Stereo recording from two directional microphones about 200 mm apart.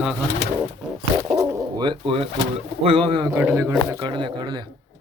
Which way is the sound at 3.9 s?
20° right (ahead or behind).